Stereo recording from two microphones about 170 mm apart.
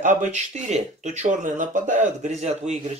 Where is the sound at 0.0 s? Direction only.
45° right (ahead or behind).